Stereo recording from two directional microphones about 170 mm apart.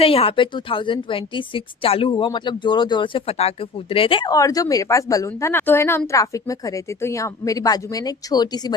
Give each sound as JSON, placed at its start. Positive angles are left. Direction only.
{"t": 0.0, "sound": "a woman's voice", "side_deg": 35}